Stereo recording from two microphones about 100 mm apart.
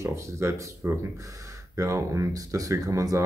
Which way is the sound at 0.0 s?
30° right (ahead or behind).